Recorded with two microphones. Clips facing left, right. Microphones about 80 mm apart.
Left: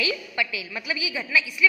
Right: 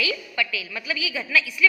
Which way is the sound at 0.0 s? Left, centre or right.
Left.